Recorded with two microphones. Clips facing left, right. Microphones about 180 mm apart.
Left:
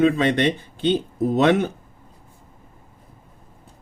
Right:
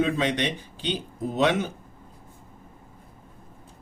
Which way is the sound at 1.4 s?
55° left (ahead or behind).